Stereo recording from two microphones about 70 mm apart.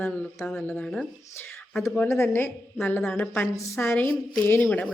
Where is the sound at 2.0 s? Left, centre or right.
Left.